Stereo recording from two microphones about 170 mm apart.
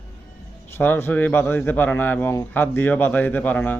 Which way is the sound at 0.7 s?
10° left (ahead or behind).